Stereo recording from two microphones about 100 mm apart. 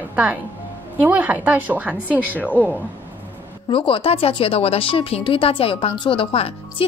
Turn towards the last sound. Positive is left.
turn(degrees=70)  # may be behind; listen again after turning